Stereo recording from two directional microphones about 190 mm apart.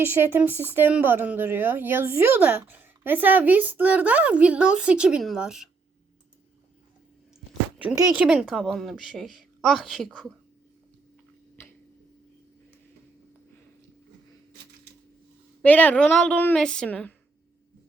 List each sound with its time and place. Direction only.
0.0 s a woman's voice: 10° right (ahead or behind)
7.9 s a woman's voice: 20° right (ahead or behind)
8.2 s a woman's voice: 5° right (ahead or behind)
15.6 s a woman's voice: 10° left (ahead or behind)